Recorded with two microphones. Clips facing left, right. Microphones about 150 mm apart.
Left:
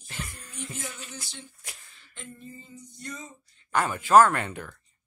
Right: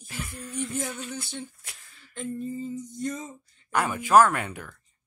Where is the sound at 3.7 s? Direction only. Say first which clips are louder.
Left 1 dB; 10° right (ahead or behind).